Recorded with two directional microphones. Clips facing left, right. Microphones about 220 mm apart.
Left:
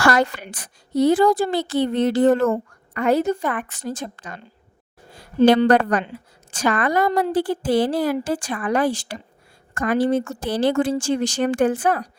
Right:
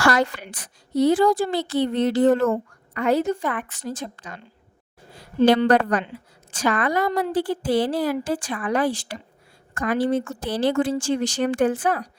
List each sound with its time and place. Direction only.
0.0 s a woman's voice: 50° left (ahead or behind)
5.4 s a woman's voice: 45° left (ahead or behind)